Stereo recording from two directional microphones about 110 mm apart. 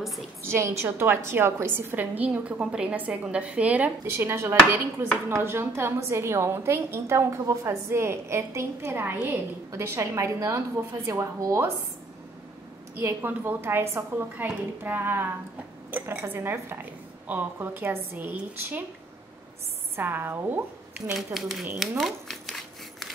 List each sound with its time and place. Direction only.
0.4 s a woman's voice: 25° right (ahead or behind)
13.0 s a woman's voice: 20° right (ahead or behind)
20.0 s speech: 20° right (ahead or behind)
21.1 s speech: centre (ahead or behind)
21.7 s a sound: centre (ahead or behind)